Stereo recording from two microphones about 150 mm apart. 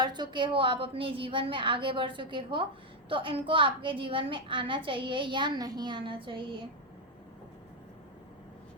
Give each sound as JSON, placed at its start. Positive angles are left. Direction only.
{"t": 0.0, "sound": "a woman's voice", "side_deg": -30}